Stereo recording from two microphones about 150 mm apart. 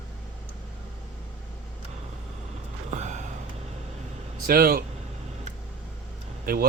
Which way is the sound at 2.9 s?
50° right (ahead or behind).